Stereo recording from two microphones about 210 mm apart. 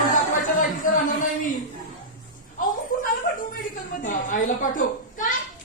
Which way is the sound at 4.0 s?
40° left (ahead or behind).